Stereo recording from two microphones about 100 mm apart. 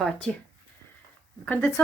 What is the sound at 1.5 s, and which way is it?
Speech, 20° left (ahead or behind).